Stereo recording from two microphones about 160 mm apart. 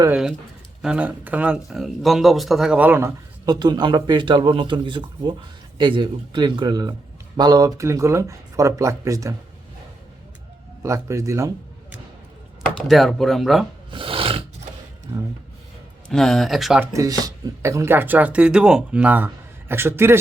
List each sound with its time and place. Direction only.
0.1 s speech: 5° right (ahead or behind)
3.4 s speech: 25° right (ahead or behind)
10.8 s a man's voice: 20° right (ahead or behind)
12.7 s speech: centre (ahead or behind)
13.9 s filing: 35° right (ahead or behind)
16.0 s speech: 5° left (ahead or behind)
16.8 s speech: 20° right (ahead or behind)